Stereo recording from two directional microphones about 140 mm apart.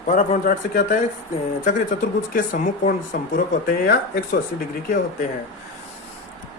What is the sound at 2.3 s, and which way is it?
Speech, 65° left (ahead or behind).